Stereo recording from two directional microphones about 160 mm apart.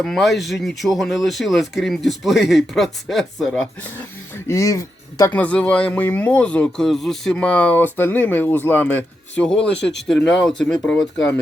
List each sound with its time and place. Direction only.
0.0 s speech: centre (ahead or behind)
4.4 s speech: 20° left (ahead or behind)
5.3 s speech: 10° left (ahead or behind)